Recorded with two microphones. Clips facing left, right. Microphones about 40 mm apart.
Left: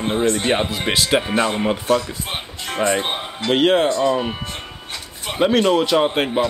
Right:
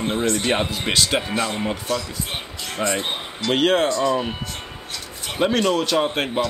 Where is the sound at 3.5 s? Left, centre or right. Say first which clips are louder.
Left 3 dB; centre.